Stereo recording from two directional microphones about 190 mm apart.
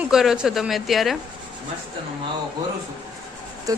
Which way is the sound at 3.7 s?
20° right (ahead or behind).